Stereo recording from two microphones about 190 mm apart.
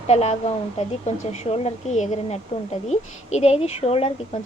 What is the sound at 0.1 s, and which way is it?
A woman's voice, 35° left (ahead or behind).